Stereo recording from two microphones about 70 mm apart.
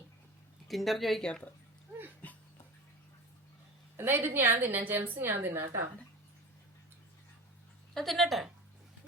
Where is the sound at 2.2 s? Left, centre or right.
Left.